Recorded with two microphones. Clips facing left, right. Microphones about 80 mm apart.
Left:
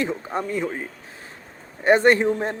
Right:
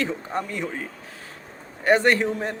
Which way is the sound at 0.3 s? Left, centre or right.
Centre.